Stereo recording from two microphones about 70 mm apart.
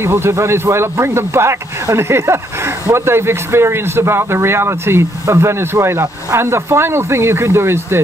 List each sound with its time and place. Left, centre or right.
0.0 s speech: right